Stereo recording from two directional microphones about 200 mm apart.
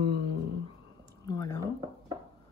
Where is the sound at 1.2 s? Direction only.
20° left (ahead or behind).